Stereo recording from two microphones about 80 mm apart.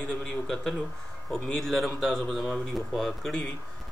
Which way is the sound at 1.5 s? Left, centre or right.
Centre.